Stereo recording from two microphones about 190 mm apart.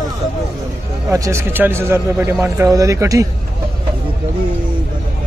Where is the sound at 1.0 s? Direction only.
15° right (ahead or behind).